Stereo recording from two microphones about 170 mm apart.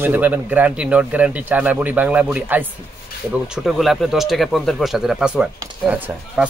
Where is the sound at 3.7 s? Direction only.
Centre (ahead or behind).